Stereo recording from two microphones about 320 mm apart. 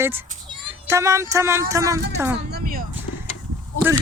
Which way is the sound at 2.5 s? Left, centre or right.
Right.